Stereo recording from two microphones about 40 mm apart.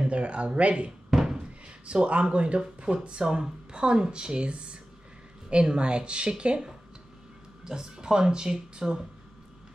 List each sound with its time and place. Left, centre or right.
0.0 s speech: right
1.1 s door: centre
1.9 s speech: right